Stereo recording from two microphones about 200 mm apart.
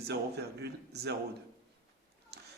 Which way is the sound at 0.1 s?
55° right (ahead or behind).